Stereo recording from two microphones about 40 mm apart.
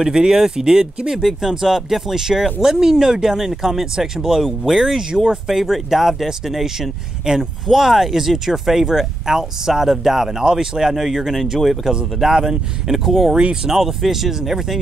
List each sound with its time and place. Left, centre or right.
0.0 s speech: centre
11.9 s speech: centre
13.7 s speech: centre